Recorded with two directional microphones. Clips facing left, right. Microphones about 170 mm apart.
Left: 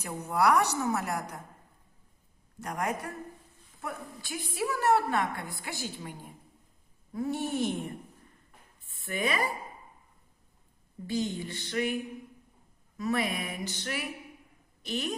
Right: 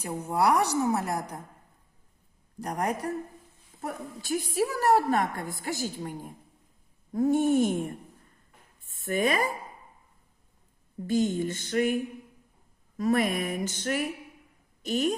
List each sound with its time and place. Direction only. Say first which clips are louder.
0.3 s a woman's voice: right 1 dB; 30° right (ahead or behind)
2.6 s a woman's voice: right 4 dB; 35° right (ahead or behind)
5.6 s music: right 9 dB; 40° right (ahead or behind)
8.9 s speech: right 5 dB; 45° right (ahead or behind)
11.0 s music: right 6 dB; 45° right (ahead or behind)
13.0 s music: right 5 dB; 45° right (ahead or behind)
14.8 s a woman's voice: right 7 dB; 40° right (ahead or behind)